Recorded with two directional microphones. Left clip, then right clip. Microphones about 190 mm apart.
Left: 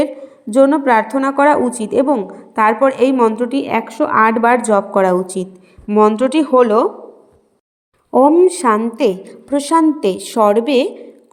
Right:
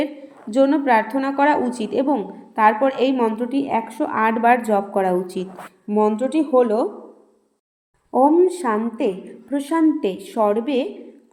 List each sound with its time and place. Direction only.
0.5 s a woman's voice: 40° left (ahead or behind)
5.9 s speech: 25° left (ahead or behind)
8.1 s a woman's voice: 35° left (ahead or behind); by 10.8 s 60° left (ahead or behind)